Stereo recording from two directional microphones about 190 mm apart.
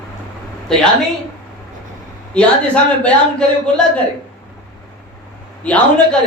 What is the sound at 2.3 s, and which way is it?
Speech, 5° left (ahead or behind).